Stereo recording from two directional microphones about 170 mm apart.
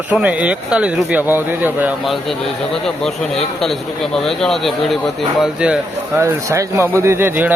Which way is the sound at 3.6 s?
Centre (ahead or behind).